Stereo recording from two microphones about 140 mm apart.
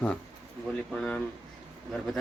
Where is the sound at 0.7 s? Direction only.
5° left (ahead or behind).